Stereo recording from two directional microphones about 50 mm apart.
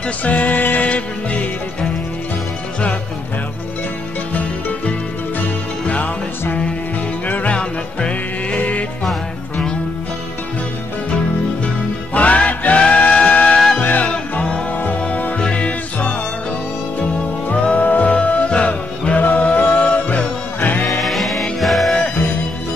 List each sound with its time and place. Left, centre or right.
0.2 s music: left
7.2 s music: left
7.5 s music: left
11.6 s music: left
17.5 s music: left
18.1 s music: left
21.0 s music: centre